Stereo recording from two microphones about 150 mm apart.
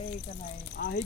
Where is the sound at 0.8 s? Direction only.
80° left.